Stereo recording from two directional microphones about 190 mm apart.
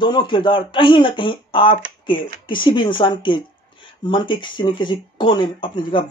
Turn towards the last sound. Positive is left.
turn(degrees=25)  # may be behind; listen again after turning